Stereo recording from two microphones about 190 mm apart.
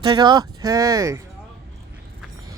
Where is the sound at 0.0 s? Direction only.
20° right (ahead or behind).